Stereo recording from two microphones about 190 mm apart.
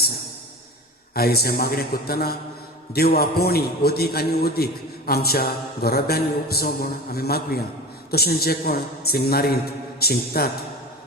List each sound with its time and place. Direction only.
1.1 s a man's voice: 55° left (ahead or behind)